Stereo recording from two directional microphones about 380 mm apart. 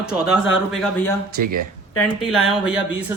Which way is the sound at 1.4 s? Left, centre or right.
Right.